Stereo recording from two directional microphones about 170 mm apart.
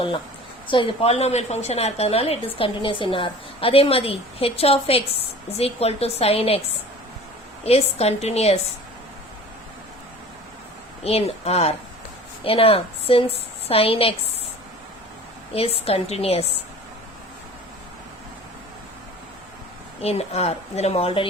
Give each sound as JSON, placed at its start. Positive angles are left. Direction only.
{"t": 0.7, "sound": "a woman's voice", "side_deg": 30}
{"t": 7.6, "sound": "a woman's voice", "side_deg": 35}
{"t": 11.0, "sound": "a woman's voice", "side_deg": 35}
{"t": 15.5, "sound": "a woman's voice", "side_deg": 35}
{"t": 20.0, "sound": "a woman's voice", "side_deg": 35}